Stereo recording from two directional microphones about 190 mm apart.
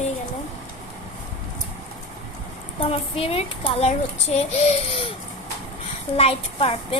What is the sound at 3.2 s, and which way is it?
A child's voice, 30° left (ahead or behind).